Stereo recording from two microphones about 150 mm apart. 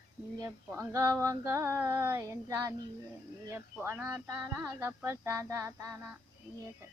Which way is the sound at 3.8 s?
15° right (ahead or behind).